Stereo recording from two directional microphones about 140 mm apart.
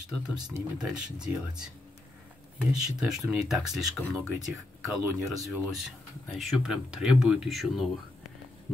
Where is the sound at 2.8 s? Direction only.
5° right (ahead or behind).